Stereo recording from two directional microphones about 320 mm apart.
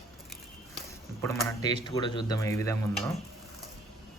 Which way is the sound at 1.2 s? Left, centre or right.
Centre.